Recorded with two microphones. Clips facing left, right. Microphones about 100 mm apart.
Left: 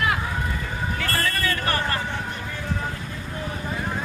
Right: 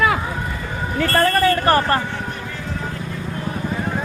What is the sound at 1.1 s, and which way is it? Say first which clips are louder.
Speech: right 11 dB; 50° right (ahead or behind).